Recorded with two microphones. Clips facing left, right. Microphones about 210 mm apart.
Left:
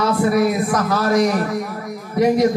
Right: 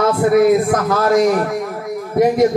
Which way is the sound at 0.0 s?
50° right (ahead or behind).